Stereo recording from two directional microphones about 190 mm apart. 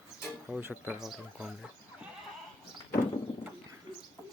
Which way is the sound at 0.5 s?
10° right (ahead or behind).